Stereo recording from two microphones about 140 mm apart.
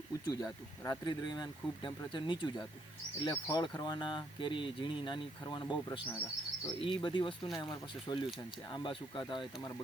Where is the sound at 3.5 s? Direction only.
30° left (ahead or behind).